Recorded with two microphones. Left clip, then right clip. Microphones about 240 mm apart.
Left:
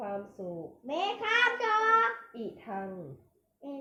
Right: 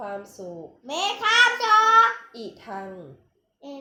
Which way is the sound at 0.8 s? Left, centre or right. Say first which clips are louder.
Right 8 dB; centre.